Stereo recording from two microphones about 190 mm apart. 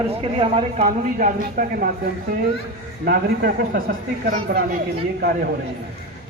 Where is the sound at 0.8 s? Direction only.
45° right (ahead or behind).